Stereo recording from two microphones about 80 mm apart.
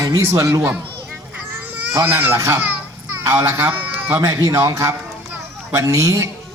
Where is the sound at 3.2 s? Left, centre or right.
Right.